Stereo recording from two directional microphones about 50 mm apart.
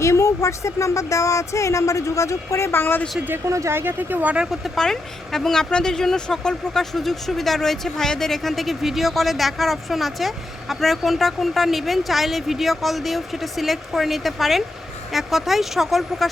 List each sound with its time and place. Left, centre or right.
0.0 s speech: left
2.7 s speech: left
3.4 s speech: right
3.8 s speech: right
4.8 s speech: centre